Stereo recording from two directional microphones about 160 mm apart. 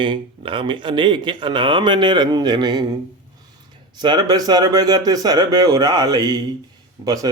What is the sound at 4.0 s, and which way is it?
Speech, 25° right (ahead or behind).